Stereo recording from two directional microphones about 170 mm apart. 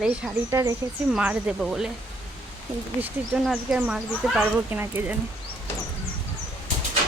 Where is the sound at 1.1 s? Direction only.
5° right (ahead or behind).